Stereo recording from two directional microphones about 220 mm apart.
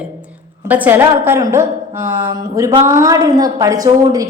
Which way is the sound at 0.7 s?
10° right (ahead or behind).